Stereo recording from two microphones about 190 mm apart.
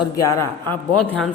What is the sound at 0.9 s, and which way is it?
Speech, 5° left (ahead or behind).